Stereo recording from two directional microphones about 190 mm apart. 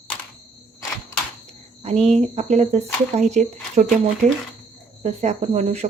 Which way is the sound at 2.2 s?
35° right (ahead or behind).